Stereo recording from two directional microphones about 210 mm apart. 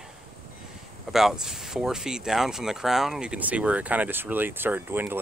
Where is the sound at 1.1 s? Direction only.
Centre (ahead or behind).